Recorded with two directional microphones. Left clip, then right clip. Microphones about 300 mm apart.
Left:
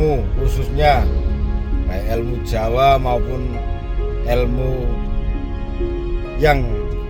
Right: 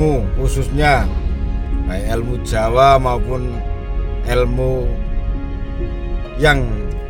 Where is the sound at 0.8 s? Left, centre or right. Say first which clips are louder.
Even; right.